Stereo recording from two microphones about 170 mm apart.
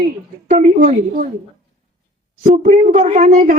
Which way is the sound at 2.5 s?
50° right (ahead or behind).